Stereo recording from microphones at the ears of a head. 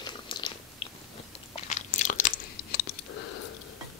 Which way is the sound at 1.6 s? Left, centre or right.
Left.